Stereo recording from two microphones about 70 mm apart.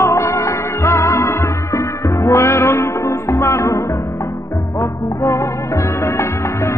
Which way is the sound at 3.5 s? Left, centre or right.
Left.